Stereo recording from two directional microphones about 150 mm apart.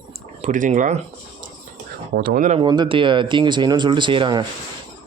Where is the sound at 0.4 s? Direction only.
55° right (ahead or behind).